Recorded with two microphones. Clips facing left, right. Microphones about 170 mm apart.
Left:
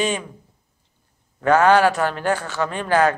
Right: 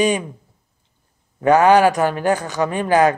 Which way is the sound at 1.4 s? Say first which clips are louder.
Right 3 dB; 15° right (ahead or behind).